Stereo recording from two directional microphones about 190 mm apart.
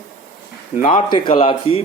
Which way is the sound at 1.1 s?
25° left (ahead or behind).